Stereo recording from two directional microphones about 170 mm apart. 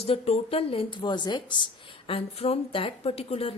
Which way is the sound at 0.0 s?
35° left (ahead or behind).